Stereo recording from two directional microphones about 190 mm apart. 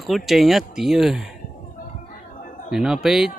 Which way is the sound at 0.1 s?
Centre (ahead or behind).